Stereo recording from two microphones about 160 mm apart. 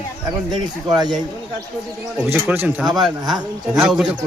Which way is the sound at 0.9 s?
25° right (ahead or behind).